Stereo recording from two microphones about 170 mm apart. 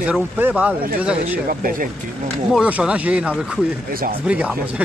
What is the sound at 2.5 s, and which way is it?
Speech, 5° right (ahead or behind).